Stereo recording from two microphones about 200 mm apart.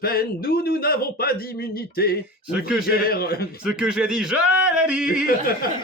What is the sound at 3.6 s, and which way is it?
Speech, 5° right (ahead or behind).